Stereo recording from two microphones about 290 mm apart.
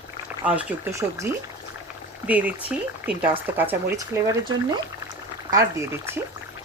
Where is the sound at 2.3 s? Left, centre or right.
Centre.